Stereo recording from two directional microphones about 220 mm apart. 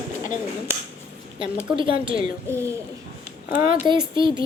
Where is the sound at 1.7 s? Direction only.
25° right (ahead or behind).